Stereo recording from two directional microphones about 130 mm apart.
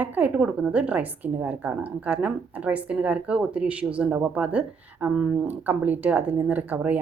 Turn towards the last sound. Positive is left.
turn(degrees=-15)  # may be behind; listen again after turning